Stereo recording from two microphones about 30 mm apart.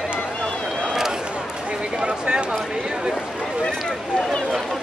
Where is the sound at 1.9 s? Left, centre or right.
Right.